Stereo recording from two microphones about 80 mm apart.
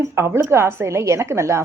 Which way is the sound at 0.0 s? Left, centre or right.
Right.